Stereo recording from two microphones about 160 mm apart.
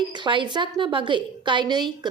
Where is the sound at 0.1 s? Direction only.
30° right (ahead or behind).